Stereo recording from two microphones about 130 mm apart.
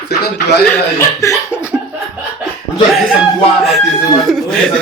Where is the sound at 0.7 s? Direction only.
20° left (ahead or behind).